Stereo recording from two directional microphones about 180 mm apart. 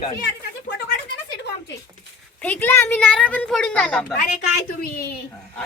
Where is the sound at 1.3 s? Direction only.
70° left (ahead or behind).